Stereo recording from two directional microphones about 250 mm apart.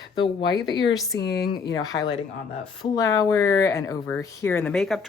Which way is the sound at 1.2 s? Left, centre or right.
Left.